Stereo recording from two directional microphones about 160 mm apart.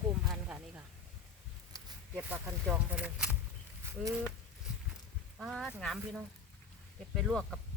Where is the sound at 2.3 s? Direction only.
15° right (ahead or behind).